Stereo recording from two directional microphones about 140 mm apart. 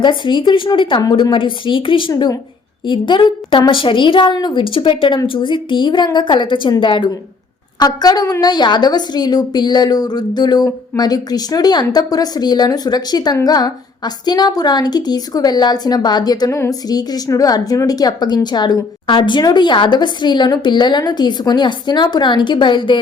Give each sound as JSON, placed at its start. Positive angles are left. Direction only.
{"t": 0.0, "sound": "a woman's voice", "side_deg": 35}